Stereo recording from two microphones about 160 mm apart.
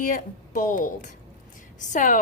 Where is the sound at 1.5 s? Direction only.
55° left (ahead or behind).